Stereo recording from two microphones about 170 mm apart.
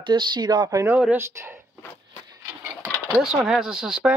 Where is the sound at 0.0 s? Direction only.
25° right (ahead or behind).